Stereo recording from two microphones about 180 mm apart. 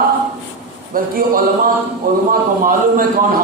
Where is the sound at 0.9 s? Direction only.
50° right (ahead or behind).